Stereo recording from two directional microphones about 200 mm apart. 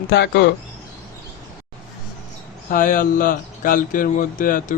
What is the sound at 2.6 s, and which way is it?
Speech, 45° left (ahead or behind).